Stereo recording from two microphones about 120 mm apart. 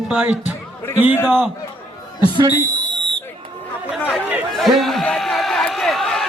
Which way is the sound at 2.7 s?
40° right (ahead or behind).